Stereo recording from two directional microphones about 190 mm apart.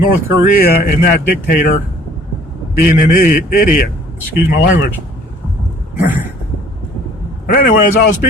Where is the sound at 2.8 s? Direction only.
45° left (ahead or behind).